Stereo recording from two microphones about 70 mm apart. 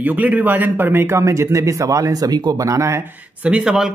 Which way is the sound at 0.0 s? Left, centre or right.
Right.